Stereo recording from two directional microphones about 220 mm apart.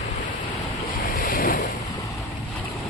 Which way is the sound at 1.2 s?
40° left (ahead or behind).